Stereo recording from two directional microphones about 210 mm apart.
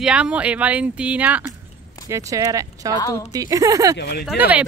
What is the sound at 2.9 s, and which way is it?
Speech, 15° left (ahead or behind).